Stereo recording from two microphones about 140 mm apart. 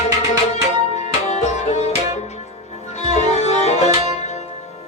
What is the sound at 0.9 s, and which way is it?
Music, 50° left (ahead or behind).